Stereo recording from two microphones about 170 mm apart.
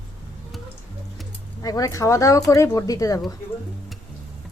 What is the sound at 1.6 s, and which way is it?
Speech, 20° left (ahead or behind).